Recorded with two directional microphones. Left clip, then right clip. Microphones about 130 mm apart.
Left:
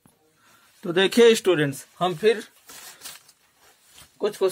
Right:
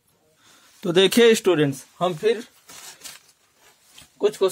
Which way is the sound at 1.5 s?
45° right (ahead or behind).